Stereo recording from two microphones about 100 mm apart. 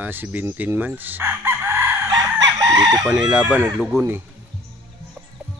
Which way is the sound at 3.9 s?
25° right (ahead or behind).